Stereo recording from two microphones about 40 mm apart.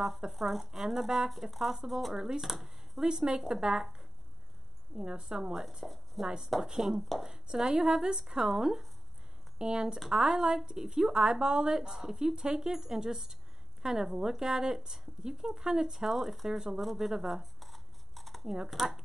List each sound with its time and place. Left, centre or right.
0.3 s a woman's voice: centre
2.1 s speech: centre
2.4 s speech: centre
3.0 s a woman's voice: centre
5.2 s a woman's voice: centre
6.2 s a woman's voice: centre
16.8 s a sound: centre
18.4 s a woman's voice: centre